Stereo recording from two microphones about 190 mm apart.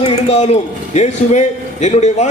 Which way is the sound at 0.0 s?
35° left (ahead or behind).